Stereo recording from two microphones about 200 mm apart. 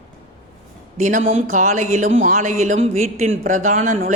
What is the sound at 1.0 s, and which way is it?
Speech, 40° right (ahead or behind).